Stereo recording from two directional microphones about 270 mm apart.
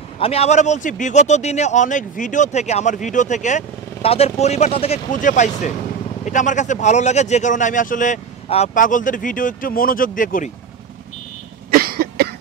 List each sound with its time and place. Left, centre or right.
0.2 s speech: left
11.7 s cough: right